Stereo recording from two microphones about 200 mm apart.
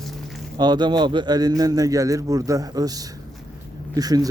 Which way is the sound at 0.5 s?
20° right (ahead or behind).